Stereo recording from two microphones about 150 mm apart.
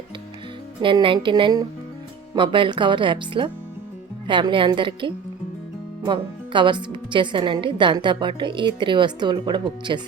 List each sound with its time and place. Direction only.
0.8 s a woman's voice: 35° right (ahead or behind)